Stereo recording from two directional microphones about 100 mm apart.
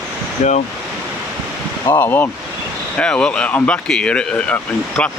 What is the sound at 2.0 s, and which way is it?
Speech, 20° left (ahead or behind).